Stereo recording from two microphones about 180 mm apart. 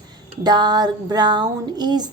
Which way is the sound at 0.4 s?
25° right (ahead or behind).